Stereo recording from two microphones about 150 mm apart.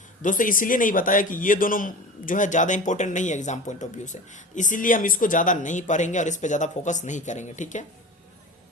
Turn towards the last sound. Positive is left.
turn(degrees=55)  # may be behind; listen again after turning